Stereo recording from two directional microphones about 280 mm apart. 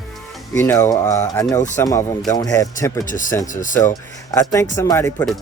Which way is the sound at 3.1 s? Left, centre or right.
Left.